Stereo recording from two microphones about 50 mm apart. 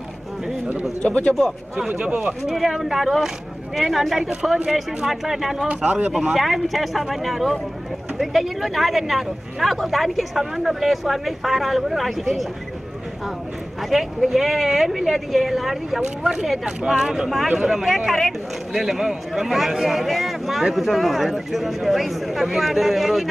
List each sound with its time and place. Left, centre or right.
1.0 s speech: left
1.8 s speech: centre
2.4 s speech: centre
5.7 s speech: right
6.3 s speech: centre
13.8 s speech: centre